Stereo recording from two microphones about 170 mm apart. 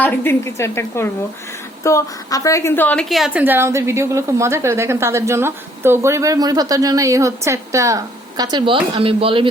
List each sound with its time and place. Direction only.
0.0 s a woman's voice: 15° left (ahead or behind); by 9.5 s 30° right (ahead or behind)